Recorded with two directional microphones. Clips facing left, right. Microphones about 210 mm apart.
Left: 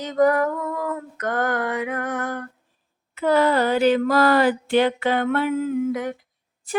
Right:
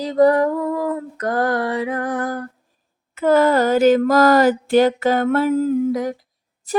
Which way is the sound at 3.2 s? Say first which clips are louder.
Right 4 dB; 45° right (ahead or behind).